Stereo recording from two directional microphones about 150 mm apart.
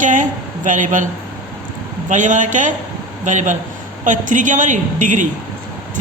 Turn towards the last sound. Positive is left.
turn(degrees=-60)  # may be behind; listen again after turning